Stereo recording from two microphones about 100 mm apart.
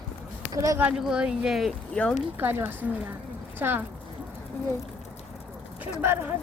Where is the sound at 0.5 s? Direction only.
35° right (ahead or behind).